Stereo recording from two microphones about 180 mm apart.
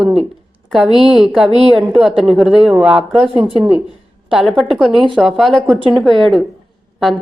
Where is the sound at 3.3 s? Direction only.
30° right (ahead or behind).